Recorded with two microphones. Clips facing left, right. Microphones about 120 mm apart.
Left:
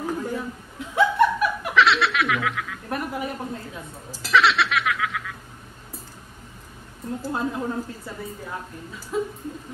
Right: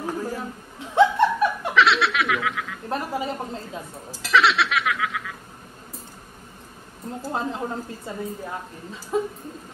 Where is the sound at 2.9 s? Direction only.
25° right (ahead or behind).